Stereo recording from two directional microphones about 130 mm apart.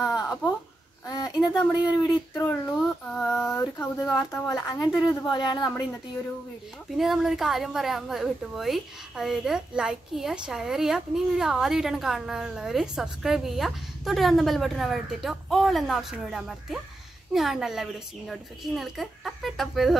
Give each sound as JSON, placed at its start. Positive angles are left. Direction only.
{"t": 0.0, "sound": "a sound", "side_deg": -5}
{"t": 1.0, "sound": "a sound", "side_deg": 30}
{"t": 2.3, "sound": "speech", "side_deg": 25}
{"t": 3.1, "sound": "a woman's voice", "side_deg": 5}
{"t": 3.5, "sound": "speech", "side_deg": 20}
{"t": 7.0, "sound": "a woman's voice", "side_deg": 0}